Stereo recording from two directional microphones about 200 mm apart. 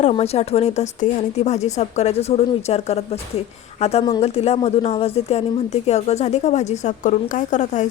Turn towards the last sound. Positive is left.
turn(degrees=35)  # may be behind; listen again after turning